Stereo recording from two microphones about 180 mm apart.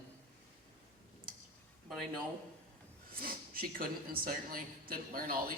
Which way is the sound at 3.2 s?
55° right (ahead or behind).